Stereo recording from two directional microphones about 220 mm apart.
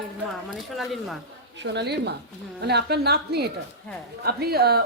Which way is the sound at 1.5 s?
50° right (ahead or behind).